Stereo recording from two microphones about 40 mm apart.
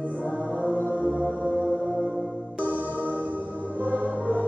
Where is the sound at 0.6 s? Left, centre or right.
Left.